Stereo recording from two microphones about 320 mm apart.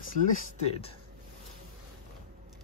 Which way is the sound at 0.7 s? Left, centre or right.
Centre.